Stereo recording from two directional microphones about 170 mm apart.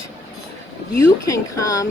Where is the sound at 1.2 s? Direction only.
20° left (ahead or behind).